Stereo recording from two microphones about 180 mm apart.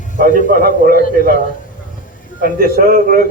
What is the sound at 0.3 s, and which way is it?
Speech, 45° left (ahead or behind).